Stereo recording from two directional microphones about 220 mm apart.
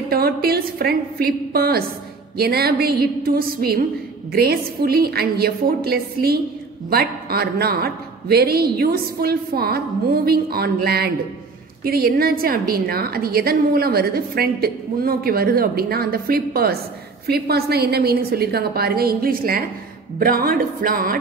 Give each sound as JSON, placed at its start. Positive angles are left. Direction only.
{"t": 0.1, "sound": "a woman's voice", "side_deg": -45}